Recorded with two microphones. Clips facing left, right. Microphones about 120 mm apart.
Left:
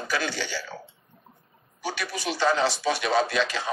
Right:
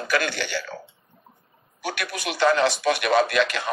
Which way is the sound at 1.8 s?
65° right (ahead or behind).